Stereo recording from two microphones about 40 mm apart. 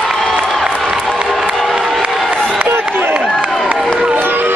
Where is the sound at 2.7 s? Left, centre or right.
Right.